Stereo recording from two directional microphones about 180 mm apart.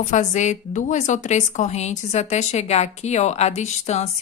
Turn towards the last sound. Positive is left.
turn(degrees=40)  # may be behind; listen again after turning